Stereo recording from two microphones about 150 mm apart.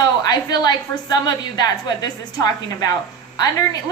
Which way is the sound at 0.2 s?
25° left (ahead or behind).